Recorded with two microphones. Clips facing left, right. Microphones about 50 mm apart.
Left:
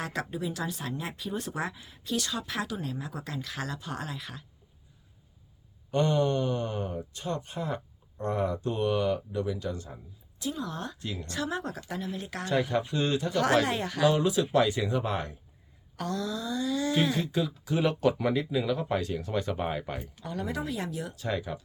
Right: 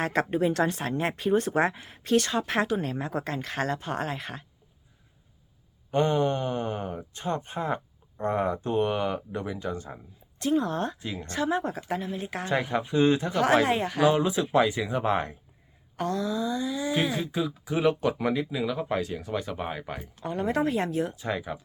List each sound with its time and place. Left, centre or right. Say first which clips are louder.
0.0 s speech: right 8 dB; right
5.9 s speech: right 2 dB; right
10.3 s speech: right 9 dB; right
11.2 s speech: right 6 dB; right; by 14.9 s centre
14.9 s speech: right 4 dB; right; by 20.0 s centre
20.2 s speech: right 6 dB; right
20.5 s speech: right 9 dB; right
21.2 s speech: right 1 dB; centre